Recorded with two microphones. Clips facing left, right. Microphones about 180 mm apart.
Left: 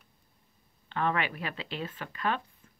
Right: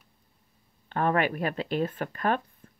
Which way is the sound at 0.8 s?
45° right (ahead or behind).